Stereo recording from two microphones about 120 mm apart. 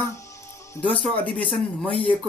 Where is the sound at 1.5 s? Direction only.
10° left (ahead or behind).